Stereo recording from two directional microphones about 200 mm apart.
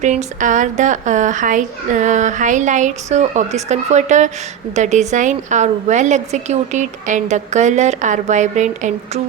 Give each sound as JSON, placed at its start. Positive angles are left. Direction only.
{"t": 0.0, "sound": "a woman's voice", "side_deg": -35}